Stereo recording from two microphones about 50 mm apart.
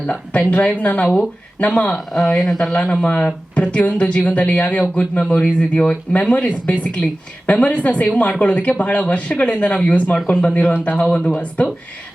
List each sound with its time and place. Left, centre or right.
0.5 s speech: left
1.9 s speech: centre
2.8 s speech: left
10.2 s speech: centre
10.4 s speech: left